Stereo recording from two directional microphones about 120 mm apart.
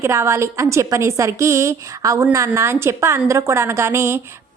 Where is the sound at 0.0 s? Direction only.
25° right (ahead or behind).